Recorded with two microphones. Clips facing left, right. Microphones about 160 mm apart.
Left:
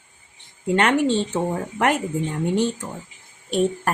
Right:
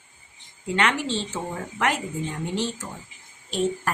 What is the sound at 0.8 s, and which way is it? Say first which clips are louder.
Speech: left 6 dB; 50° left (ahead or behind).